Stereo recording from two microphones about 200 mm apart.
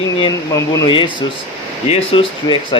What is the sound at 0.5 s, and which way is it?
A man's voice, 20° left (ahead or behind).